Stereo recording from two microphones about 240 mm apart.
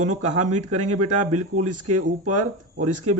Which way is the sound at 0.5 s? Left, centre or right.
Right.